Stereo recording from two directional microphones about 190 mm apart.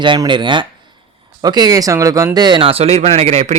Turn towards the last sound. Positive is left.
turn(degrees=-35)  # may be behind; listen again after turning